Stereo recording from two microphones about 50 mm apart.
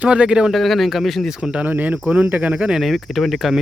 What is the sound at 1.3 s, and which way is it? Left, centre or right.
Speech, right.